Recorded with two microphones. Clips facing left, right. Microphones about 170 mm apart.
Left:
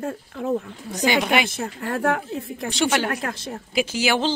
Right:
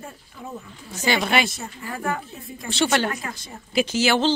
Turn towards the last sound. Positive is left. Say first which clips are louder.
# right 1 dB
turn(degrees=15)  # may be behind; listen again after turning